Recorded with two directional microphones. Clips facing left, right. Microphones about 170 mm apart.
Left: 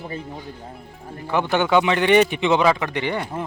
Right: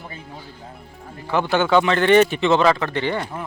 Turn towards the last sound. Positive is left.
turn(degrees=15)  # may be behind; listen again after turning